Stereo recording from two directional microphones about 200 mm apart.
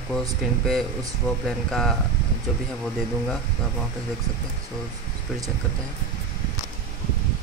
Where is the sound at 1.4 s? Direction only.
Centre (ahead or behind).